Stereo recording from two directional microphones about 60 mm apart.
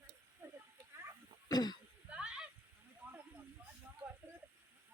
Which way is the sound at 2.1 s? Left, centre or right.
Centre.